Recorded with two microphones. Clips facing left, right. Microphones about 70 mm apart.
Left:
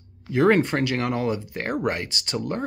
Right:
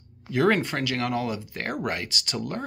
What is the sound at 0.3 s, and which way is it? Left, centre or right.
Speech, left.